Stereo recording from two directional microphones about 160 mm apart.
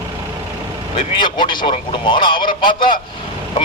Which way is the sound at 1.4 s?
30° left (ahead or behind).